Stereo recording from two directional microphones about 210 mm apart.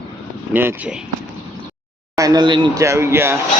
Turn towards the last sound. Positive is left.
turn(degrees=-10)  # may be behind; listen again after turning